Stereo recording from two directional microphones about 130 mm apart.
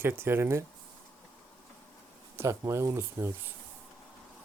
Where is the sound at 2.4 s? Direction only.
20° right (ahead or behind).